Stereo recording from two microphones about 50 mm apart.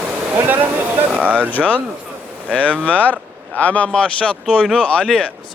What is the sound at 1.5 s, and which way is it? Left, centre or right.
Speech, left.